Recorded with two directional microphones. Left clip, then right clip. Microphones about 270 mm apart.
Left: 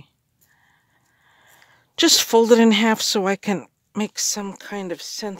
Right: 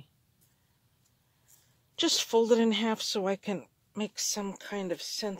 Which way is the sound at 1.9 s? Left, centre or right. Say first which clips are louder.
Left 11 dB; left.